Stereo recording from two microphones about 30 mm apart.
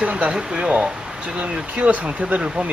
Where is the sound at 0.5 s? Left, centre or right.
Right.